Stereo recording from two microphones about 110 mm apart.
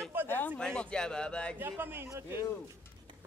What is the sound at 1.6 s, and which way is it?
Speech, 20° right (ahead or behind).